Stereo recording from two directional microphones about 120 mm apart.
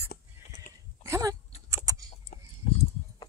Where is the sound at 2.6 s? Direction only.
60° left (ahead or behind).